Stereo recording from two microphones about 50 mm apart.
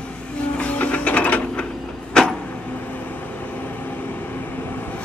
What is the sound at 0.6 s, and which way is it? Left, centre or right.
Music, left.